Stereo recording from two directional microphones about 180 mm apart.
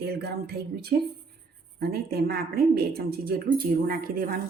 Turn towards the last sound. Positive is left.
turn(degrees=-55)  # may be behind; listen again after turning